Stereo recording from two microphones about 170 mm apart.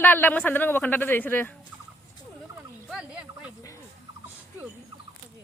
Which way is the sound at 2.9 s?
5° right (ahead or behind).